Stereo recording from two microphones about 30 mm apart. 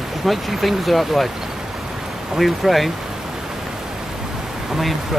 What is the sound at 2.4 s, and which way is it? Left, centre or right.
Speech, centre.